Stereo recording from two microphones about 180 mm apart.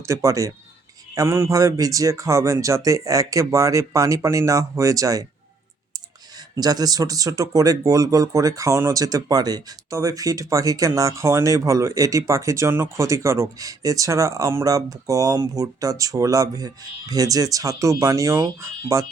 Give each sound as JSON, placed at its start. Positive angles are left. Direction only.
{"t": 0.0, "sound": "speech", "side_deg": -15}
{"t": 6.3, "sound": "speech", "side_deg": -20}